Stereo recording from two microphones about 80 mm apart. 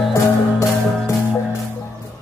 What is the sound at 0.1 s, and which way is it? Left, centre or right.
Music, left.